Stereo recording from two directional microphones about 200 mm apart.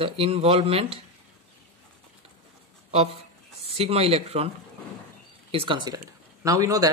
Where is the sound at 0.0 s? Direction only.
30° right (ahead or behind).